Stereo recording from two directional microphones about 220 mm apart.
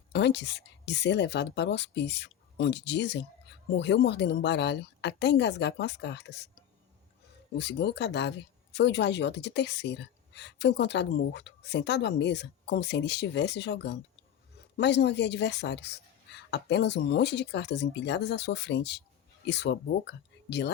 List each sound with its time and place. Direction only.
0.1 s speech: 50° left (ahead or behind)
7.5 s speech: 50° left (ahead or behind)